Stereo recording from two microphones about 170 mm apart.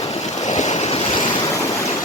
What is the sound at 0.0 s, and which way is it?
Waves, 40° left (ahead or behind).